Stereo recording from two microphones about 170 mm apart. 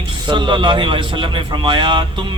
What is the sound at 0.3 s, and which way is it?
A man's voice, 25° right (ahead or behind).